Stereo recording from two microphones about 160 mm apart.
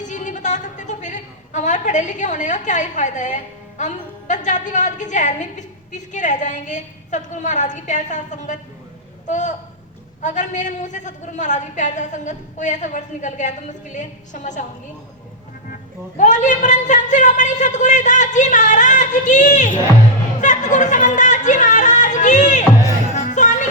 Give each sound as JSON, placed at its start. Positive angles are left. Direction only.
{"t": 0.0, "sound": "a woman's voice", "side_deg": 50}
{"t": 15.7, "sound": "a woman's voice", "side_deg": 50}
{"t": 20.4, "sound": "a sound", "side_deg": 50}
{"t": 23.1, "sound": "music", "side_deg": 50}